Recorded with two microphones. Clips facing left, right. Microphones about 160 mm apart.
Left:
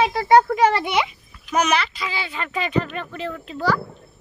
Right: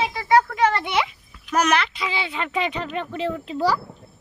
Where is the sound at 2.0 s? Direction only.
20° right (ahead or behind).